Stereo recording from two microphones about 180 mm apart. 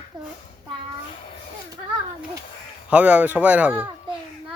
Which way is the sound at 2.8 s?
10° right (ahead or behind).